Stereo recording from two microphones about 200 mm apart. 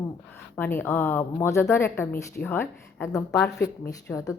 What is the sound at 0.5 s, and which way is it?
A woman's voice, 10° left (ahead or behind).